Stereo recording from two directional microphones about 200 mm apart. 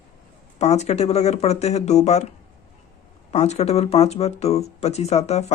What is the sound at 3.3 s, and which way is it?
Speech, 35° left (ahead or behind).